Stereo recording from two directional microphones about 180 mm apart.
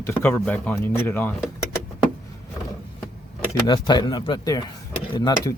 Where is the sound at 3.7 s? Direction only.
25° left (ahead or behind).